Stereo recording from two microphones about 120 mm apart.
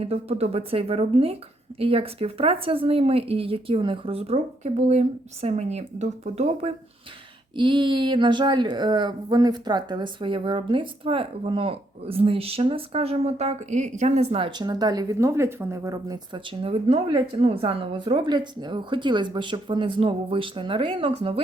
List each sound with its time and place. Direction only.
0.0 s speech: 55° right (ahead or behind)
7.5 s speech: 40° right (ahead or behind)
17.1 s a woman's voice: 35° right (ahead or behind)
17.4 s speech: 50° right (ahead or behind)